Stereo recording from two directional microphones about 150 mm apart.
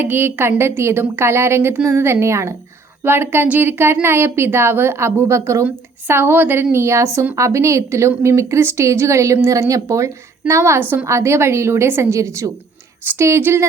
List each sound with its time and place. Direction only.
0.0 s a woman's voice: 15° right (ahead or behind)